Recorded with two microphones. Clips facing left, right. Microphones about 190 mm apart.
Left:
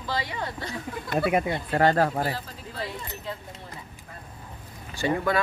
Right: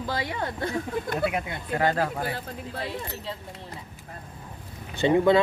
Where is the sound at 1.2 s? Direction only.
50° left (ahead or behind).